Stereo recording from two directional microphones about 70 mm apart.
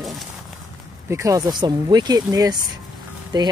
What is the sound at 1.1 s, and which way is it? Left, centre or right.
Speech, right.